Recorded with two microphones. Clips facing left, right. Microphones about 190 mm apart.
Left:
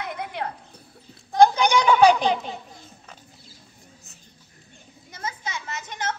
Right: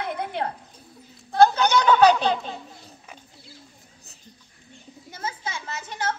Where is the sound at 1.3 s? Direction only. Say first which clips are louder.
Left 1 dB; 15° left (ahead or behind).